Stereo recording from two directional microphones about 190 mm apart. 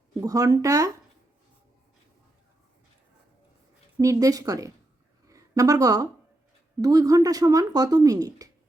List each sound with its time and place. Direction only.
0.2 s a woman's voice: 20° right (ahead or behind)
3.9 s a woman's voice: 15° right (ahead or behind)